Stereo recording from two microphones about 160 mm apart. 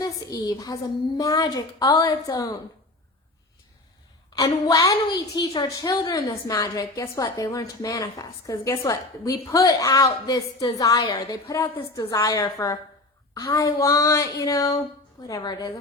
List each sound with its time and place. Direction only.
0.0 s a woman's voice: 20° left (ahead or behind)
4.4 s a woman's voice: 25° left (ahead or behind)